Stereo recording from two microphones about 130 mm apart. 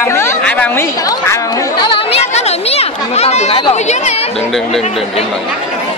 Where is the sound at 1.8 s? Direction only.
40° left (ahead or behind).